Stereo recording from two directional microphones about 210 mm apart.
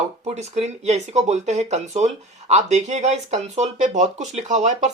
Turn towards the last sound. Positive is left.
turn(degrees=-35)  # may be behind; listen again after turning